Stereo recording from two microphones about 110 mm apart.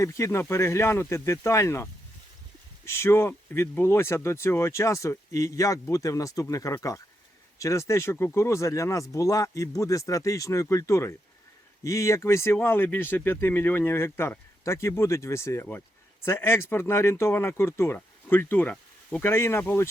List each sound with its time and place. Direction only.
0.0 s speech: 25° left (ahead or behind)